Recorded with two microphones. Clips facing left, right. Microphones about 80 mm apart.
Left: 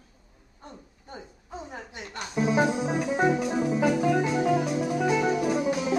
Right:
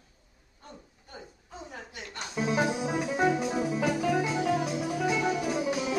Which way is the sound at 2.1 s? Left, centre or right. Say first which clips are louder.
Left 4 dB; centre.